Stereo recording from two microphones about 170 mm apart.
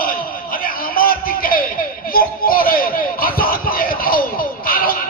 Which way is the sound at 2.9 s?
60° left (ahead or behind).